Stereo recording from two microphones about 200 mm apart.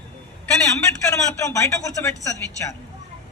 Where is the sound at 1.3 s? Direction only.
15° left (ahead or behind).